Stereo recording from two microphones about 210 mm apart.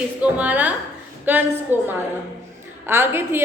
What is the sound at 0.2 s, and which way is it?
A woman's voice, 5° right (ahead or behind).